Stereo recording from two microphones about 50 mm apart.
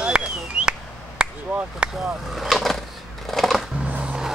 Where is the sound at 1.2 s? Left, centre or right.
Centre.